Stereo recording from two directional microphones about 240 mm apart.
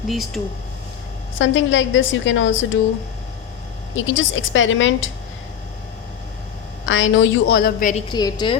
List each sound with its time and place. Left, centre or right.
0.1 s speech: centre
1.4 s a woman's voice: left
3.9 s a woman's voice: left
6.8 s a woman's voice: left
8.0 s a woman's voice: centre